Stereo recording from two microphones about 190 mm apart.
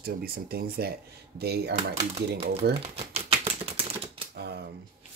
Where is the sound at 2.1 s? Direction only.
30° right (ahead or behind).